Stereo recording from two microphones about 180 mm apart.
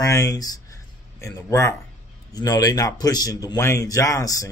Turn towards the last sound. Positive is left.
turn(degrees=20)  # may be behind; listen again after turning